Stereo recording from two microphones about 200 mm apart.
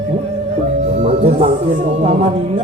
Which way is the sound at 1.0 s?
30° right (ahead or behind).